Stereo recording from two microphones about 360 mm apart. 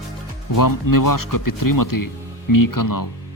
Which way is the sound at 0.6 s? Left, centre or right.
Left.